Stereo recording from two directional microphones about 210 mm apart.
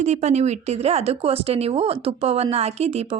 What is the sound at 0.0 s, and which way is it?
Speech, 30° right (ahead or behind).